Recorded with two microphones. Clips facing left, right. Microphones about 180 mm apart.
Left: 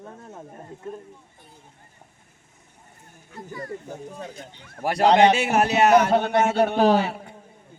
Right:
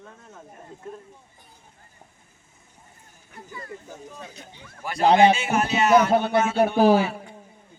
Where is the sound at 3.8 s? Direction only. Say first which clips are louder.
Left 5 dB; 60° left (ahead or behind).